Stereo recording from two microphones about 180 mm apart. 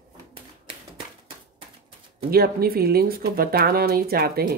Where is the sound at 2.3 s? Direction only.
55° right (ahead or behind).